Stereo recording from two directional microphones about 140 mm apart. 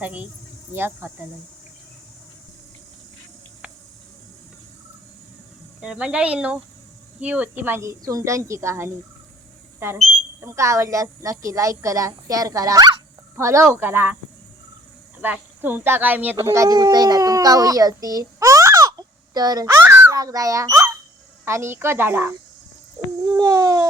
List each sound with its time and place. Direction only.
0.0 s speech: 10° right (ahead or behind)
5.8 s a woman's voice: 5° right (ahead or behind)
10.4 s a woman's voice: 20° right (ahead or behind)
15.2 s speech: 15° right (ahead or behind)
16.5 s a child's voice: 25° right (ahead or behind)